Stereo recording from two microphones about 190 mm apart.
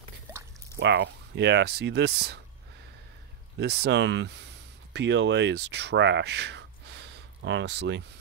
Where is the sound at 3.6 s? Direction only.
60° right (ahead or behind).